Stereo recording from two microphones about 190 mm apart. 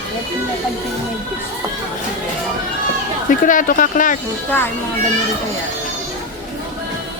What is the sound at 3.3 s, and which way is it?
Speech, 45° left (ahead or behind).